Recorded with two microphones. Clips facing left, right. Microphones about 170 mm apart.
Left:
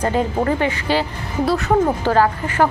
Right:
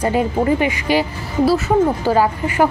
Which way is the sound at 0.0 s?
10° right (ahead or behind).